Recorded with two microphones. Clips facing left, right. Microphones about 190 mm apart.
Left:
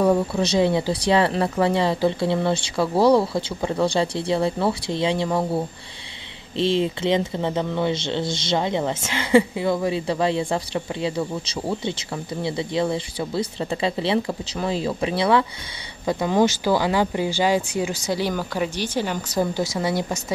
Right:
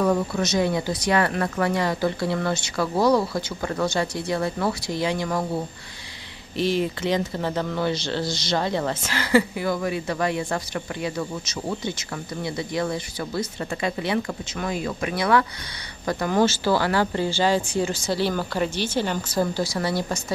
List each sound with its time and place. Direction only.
0.0 s speech: 25° left (ahead or behind)